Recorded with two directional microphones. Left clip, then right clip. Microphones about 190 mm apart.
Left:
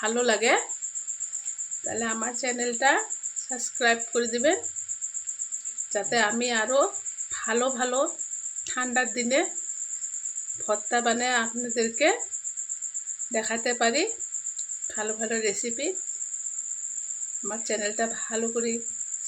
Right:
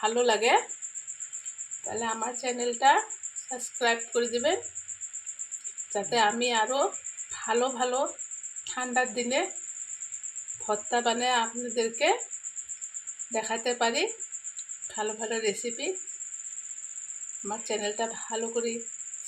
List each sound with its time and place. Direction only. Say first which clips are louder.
0.0 s speech: even; 50° left (ahead or behind)
2.4 s speech: even; 45° left (ahead or behind)
5.9 s speech: left 1 dB; 45° left (ahead or behind)
10.7 s speech: left 2 dB; 45° left (ahead or behind)
13.3 s speech: left 2 dB; 40° left (ahead or behind)
17.7 s speech: left 3 dB; 45° left (ahead or behind)